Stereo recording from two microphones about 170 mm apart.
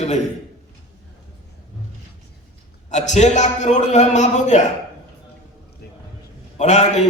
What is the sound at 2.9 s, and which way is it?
A man's voice, 45° left (ahead or behind).